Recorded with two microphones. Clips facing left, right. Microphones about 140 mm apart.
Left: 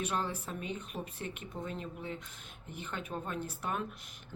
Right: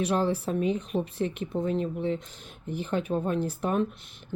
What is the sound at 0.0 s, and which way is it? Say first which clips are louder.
Speech: right 10 dB; 35° right (ahead or behind).